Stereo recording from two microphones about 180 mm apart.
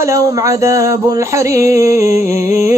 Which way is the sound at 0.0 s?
15° right (ahead or behind).